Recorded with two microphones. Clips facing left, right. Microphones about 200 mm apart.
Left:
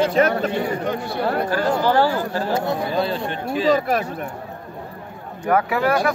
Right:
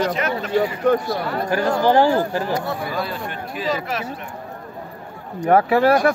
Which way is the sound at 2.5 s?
25° left (ahead or behind).